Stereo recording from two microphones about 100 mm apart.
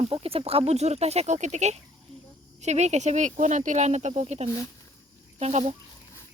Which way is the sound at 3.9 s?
90° right.